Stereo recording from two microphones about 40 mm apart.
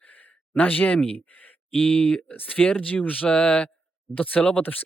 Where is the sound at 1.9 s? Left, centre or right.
Left.